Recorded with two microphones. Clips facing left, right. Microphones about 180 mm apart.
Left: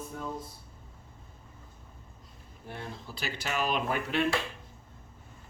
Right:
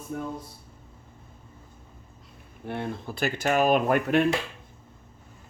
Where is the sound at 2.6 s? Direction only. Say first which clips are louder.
Right 9 dB; 60° right (ahead or behind).